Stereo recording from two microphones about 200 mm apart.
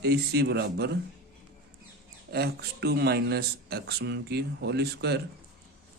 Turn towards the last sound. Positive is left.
turn(degrees=-55)  # may be behind; listen again after turning